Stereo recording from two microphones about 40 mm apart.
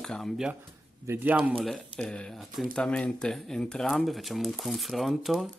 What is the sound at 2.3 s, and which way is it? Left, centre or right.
Speech, centre.